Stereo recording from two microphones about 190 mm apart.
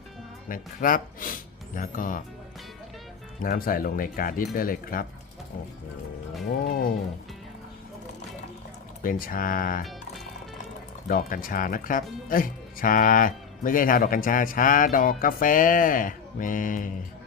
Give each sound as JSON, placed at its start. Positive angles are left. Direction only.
{"t": 0.4, "sound": "speech", "side_deg": 45}
{"t": 3.4, "sound": "speech", "side_deg": 45}
{"t": 6.7, "sound": "speech", "side_deg": 50}
{"t": 9.0, "sound": "speech", "side_deg": 45}
{"t": 11.1, "sound": "speech", "side_deg": 45}